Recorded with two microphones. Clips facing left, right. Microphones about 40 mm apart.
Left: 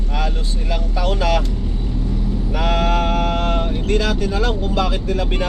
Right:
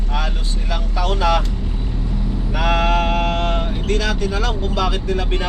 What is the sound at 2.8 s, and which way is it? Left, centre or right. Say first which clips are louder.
Mantra: right 1 dB; right.